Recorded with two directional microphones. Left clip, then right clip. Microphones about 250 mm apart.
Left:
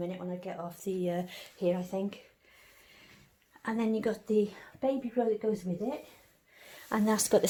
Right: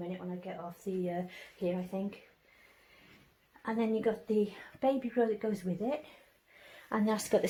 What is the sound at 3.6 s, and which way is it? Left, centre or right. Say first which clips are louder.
Speech: even; left.